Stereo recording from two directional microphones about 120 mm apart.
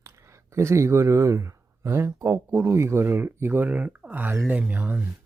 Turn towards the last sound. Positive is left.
turn(degrees=-15)  # may be behind; listen again after turning